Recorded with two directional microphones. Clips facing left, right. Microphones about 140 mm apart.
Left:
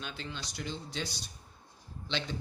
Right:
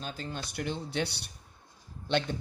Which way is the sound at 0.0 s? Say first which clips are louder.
Right 4 dB; 45° right (ahead or behind).